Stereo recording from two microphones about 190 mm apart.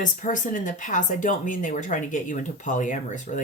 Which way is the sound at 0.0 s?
45° left (ahead or behind).